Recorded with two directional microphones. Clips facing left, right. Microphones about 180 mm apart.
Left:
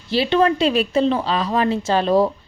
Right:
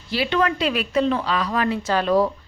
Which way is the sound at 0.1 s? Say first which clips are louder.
Left 5 dB; 30° left (ahead or behind).